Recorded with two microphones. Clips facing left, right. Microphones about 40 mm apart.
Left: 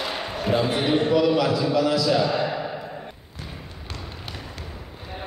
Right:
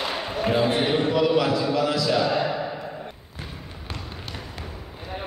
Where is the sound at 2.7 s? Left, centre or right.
Centre.